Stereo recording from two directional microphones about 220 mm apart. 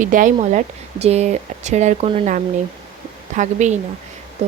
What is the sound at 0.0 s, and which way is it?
Speech, 35° right (ahead or behind).